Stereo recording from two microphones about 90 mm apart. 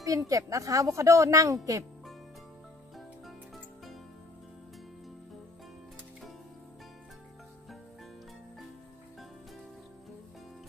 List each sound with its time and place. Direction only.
0.0 s speech: 35° right (ahead or behind)